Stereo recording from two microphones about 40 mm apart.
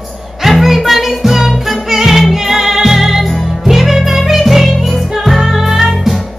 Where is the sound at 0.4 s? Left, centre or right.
Centre.